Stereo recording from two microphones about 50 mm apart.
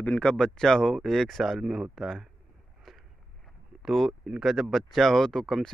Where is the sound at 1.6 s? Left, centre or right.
Centre.